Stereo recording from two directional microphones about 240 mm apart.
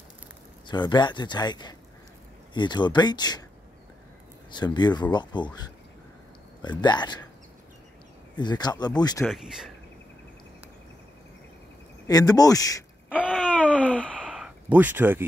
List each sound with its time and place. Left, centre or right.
0.7 s speech: centre
4.5 s speech: centre
6.6 s speech: centre
8.4 s speech: centre
9.2 s speech: centre
12.1 s speech: centre
13.2 s a sound: centre